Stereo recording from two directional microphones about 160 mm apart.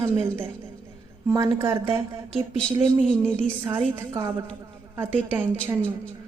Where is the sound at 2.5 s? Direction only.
5° left (ahead or behind).